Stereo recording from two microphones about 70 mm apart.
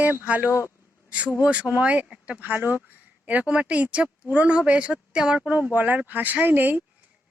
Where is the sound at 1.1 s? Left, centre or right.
Centre.